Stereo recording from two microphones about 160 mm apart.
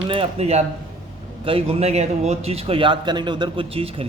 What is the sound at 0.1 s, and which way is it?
Speech, 40° right (ahead or behind).